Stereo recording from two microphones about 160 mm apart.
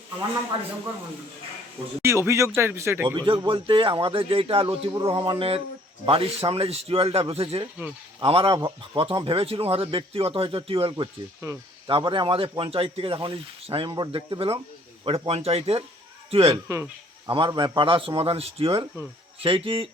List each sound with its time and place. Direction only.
2.0 s speech: 15° right (ahead or behind)
3.2 s speech: 30° right (ahead or behind)
11.4 s speech: 20° right (ahead or behind)
11.9 s speech: 30° right (ahead or behind)